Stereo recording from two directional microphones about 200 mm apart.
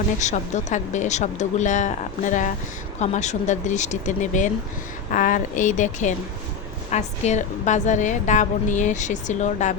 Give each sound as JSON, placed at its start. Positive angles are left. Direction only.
{"t": 0.2, "sound": "a woman's voice", "side_deg": 35}